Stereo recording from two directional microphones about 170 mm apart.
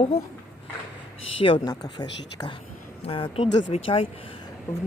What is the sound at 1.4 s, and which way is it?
Speech, 30° left (ahead or behind).